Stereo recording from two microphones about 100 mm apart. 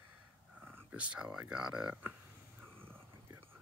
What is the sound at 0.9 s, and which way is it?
Speech, 10° right (ahead or behind).